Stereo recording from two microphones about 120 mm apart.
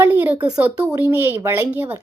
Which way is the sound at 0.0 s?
15° right (ahead or behind).